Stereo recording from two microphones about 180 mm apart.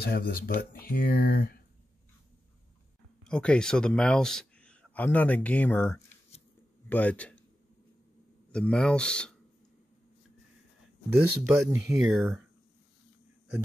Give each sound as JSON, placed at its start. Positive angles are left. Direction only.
{"t": 0.0, "sound": "speech", "side_deg": 60}
{"t": 3.3, "sound": "a man's voice", "side_deg": 5}
{"t": 8.5, "sound": "speech", "side_deg": 5}
{"t": 11.1, "sound": "speech", "side_deg": -5}